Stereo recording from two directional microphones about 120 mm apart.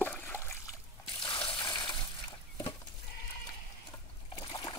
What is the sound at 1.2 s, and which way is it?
Water, 45° left (ahead or behind).